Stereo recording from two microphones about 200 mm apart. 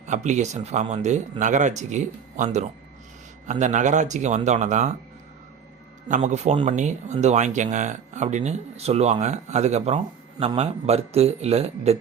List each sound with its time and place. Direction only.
0.0 s speech: 35° right (ahead or behind)
6.1 s speech: 35° right (ahead or behind)